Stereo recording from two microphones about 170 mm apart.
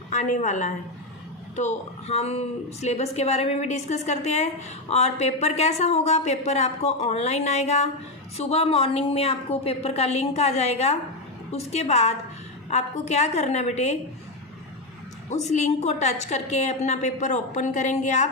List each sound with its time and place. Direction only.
0.1 s a woman's voice: 45° left (ahead or behind)
15.3 s a woman's voice: 40° left (ahead or behind)